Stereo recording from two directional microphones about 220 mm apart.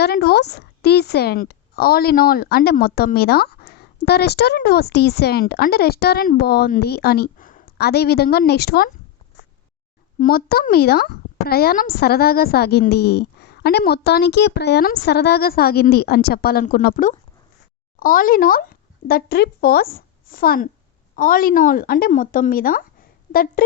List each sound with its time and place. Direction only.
0.0 s a woman's voice: 45° left (ahead or behind)
10.2 s a woman's voice: 40° left (ahead or behind)